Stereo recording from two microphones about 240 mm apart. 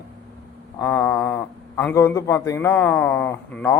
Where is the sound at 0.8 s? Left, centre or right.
Centre.